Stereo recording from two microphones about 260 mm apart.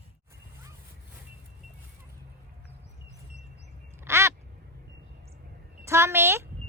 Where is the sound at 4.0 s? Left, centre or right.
Centre.